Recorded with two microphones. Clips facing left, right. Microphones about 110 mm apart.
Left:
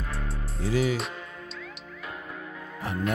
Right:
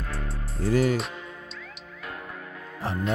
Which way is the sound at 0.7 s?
45° right (ahead or behind).